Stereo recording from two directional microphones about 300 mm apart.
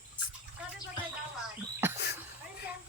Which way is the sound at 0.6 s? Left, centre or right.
Centre.